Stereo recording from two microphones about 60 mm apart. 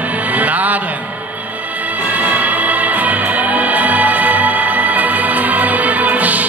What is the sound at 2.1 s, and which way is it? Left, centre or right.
Music, right.